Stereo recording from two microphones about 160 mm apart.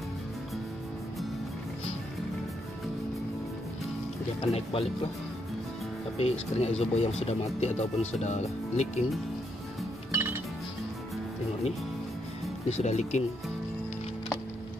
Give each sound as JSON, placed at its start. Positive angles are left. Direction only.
{"t": 4.4, "sound": "speech", "side_deg": 35}
{"t": 6.1, "sound": "speech", "side_deg": 40}
{"t": 10.1, "sound": "music", "side_deg": -15}
{"t": 12.6, "sound": "speech", "side_deg": 45}